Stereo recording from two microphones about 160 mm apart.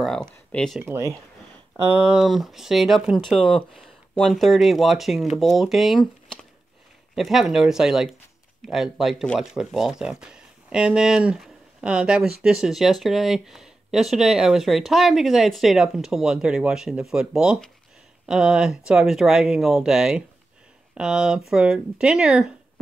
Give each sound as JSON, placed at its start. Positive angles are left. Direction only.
{"t": 0.0, "sound": "speech", "side_deg": 5}
{"t": 0.8, "sound": "speech", "side_deg": -15}